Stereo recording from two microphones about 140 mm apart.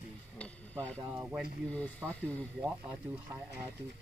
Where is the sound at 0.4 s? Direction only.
10° left (ahead or behind).